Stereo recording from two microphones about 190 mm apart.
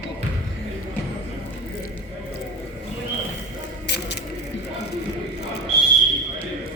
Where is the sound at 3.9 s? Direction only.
65° left (ahead or behind).